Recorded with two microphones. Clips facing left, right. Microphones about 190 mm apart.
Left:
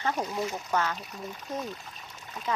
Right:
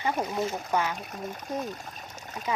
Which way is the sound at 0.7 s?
15° right (ahead or behind).